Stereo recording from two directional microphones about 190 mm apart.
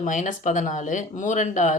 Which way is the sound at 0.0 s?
40° left (ahead or behind).